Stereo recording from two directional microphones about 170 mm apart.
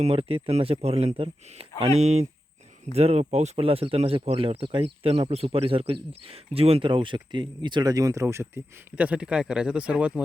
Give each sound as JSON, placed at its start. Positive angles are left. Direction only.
{"t": 0.0, "sound": "speech", "side_deg": -35}